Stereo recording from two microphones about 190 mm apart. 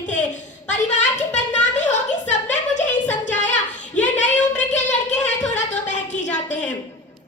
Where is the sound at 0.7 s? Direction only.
40° left (ahead or behind).